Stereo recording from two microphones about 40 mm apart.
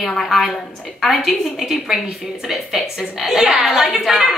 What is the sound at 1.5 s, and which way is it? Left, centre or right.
A woman's voice, centre.